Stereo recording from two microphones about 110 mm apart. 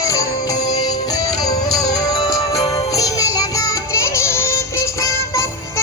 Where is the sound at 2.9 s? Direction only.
35° left (ahead or behind).